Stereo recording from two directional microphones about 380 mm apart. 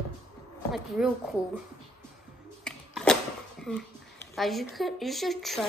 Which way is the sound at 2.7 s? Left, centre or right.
Centre.